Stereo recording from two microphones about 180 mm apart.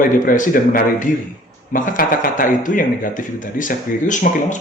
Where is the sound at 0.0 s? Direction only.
50° left (ahead or behind).